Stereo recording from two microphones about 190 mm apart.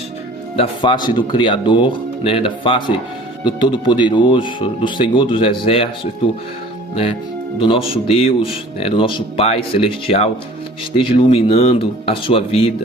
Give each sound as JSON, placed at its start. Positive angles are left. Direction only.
{"t": 0.5, "sound": "speech", "side_deg": 30}
{"t": 7.6, "sound": "speech", "side_deg": 30}